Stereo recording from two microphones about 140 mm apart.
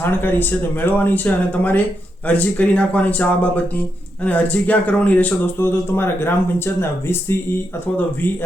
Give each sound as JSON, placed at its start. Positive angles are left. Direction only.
{"t": 0.0, "sound": "speech", "side_deg": 15}